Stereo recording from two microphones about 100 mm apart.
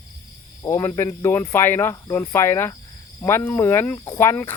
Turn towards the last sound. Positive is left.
turn(degrees=25)  # may be behind; listen again after turning